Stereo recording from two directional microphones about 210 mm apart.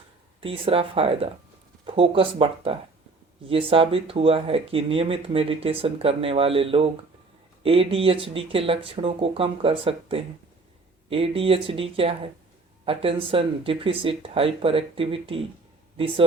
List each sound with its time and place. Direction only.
0.4 s speech: 25° right (ahead or behind)